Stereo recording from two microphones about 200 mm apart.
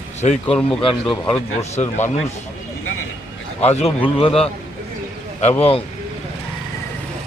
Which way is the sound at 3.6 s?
30° left (ahead or behind).